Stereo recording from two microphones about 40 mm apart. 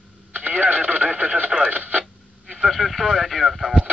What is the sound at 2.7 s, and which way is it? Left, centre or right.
Speech, centre.